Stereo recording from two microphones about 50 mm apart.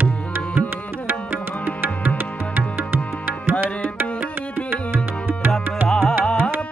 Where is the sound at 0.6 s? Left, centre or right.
Right.